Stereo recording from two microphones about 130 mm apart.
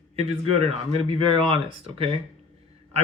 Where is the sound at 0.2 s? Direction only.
45° right (ahead or behind).